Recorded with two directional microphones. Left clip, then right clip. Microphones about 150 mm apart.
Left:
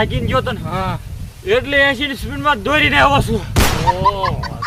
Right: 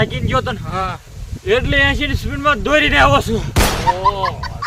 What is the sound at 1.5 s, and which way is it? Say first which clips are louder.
Speech: left 1 dB; 10° right (ahead or behind).